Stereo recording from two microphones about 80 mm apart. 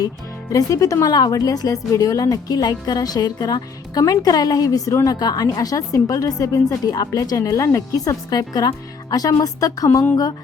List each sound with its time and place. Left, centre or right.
0.5 s a woman's voice: left